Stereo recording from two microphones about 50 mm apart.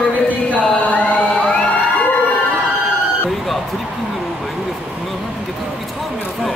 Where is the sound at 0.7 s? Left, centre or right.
Left.